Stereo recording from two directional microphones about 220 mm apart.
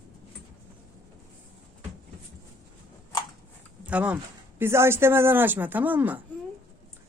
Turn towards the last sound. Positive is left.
turn(degrees=-10)  # may be behind; listen again after turning